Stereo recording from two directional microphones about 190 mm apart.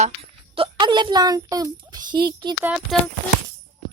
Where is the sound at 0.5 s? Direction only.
25° right (ahead or behind).